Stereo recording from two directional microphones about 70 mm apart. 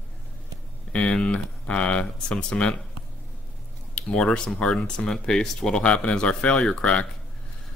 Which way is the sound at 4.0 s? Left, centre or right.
Centre.